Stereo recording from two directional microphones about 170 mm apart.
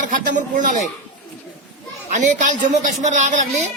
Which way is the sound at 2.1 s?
50° right (ahead or behind).